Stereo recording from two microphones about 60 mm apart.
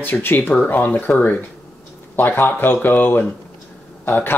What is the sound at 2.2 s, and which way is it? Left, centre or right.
Speech, left.